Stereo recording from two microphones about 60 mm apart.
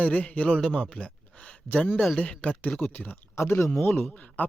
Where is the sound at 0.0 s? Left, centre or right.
Left.